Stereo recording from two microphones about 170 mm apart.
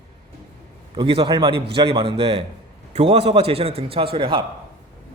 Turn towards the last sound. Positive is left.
turn(degrees=-30)  # may be behind; listen again after turning